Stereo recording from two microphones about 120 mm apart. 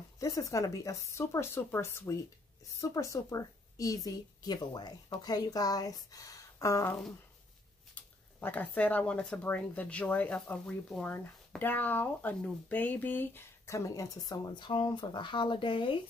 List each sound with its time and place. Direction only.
0.2 s a woman's voice: 30° left (ahead or behind); by 16.0 s 45° left (ahead or behind)